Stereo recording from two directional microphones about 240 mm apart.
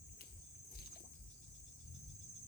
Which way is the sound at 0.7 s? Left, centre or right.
Left.